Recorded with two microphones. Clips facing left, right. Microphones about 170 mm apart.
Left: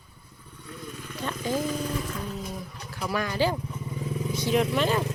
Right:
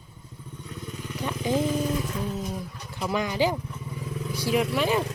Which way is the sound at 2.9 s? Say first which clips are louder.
Right 2 dB; 20° right (ahead or behind).